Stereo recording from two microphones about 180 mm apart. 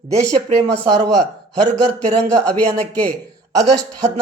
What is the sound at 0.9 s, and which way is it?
Speech, 5° left (ahead or behind).